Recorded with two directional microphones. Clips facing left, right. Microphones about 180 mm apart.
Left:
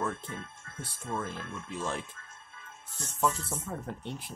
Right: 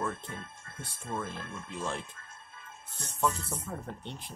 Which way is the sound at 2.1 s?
35° right (ahead or behind).